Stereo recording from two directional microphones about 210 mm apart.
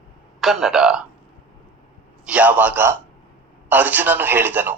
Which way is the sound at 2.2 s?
5° right (ahead or behind).